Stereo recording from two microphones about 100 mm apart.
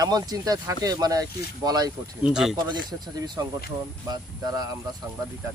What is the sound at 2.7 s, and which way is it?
Speech, 45° right (ahead or behind).